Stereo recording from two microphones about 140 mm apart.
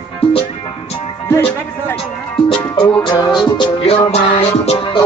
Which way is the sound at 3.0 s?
30° left (ahead or behind).